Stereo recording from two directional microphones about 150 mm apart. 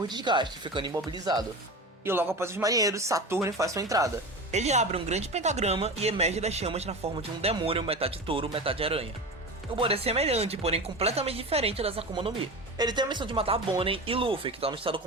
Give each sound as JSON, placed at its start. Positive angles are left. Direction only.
{"t": 0.1, "sound": "speech", "side_deg": -30}
{"t": 4.5, "sound": "speech", "side_deg": -50}